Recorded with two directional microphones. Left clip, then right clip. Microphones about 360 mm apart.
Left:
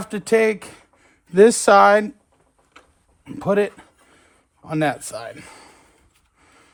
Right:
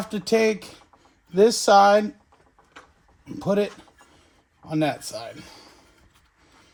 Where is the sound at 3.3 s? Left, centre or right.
Left.